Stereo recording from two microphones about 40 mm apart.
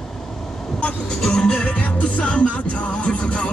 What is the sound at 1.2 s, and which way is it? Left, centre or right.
Music, centre.